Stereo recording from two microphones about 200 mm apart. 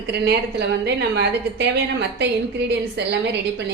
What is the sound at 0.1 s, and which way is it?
A woman's voice, 55° right (ahead or behind).